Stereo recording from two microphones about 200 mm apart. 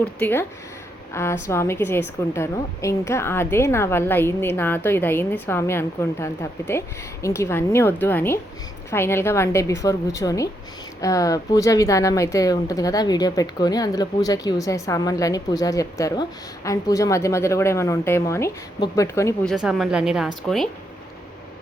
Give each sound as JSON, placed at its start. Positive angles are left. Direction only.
{"t": 0.0, "sound": "a woman's voice", "side_deg": 10}
{"t": 19.5, "sound": "a woman's voice", "side_deg": 0}